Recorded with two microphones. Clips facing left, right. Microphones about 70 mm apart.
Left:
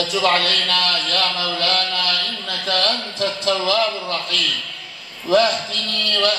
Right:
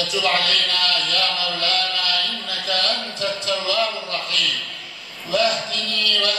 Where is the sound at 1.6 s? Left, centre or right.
Left.